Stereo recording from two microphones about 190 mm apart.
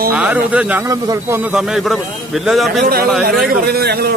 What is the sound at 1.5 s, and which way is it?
A man's voice, centre (ahead or behind).